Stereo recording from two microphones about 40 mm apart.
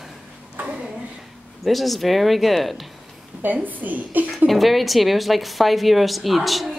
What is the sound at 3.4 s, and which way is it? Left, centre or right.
A woman's voice, right.